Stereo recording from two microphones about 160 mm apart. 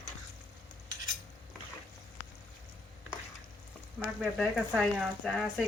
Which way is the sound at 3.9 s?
5° right (ahead or behind).